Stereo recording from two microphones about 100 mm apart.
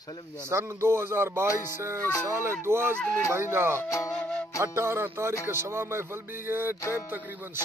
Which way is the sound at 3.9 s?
30° left (ahead or behind).